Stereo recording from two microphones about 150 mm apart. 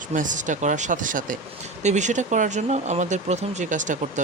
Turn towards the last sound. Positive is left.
turn(degrees=-55)  # may be behind; listen again after turning